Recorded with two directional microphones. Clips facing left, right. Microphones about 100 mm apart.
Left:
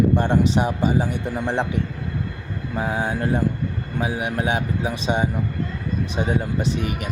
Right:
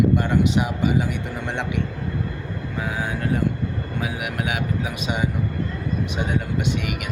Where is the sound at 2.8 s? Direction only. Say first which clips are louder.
Left 3 dB; 35° left (ahead or behind).